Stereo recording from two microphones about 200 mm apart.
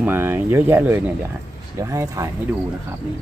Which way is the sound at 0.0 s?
10° right (ahead or behind).